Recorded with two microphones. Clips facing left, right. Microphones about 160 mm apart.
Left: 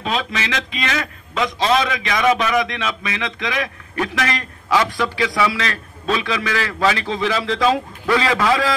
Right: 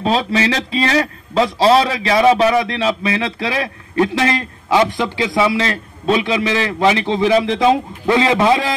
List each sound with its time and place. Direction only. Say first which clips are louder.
0.0 s a man's voice: right 7 dB; 30° right (ahead or behind)